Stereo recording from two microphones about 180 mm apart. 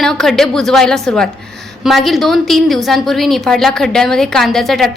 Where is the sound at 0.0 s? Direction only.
5° left (ahead or behind).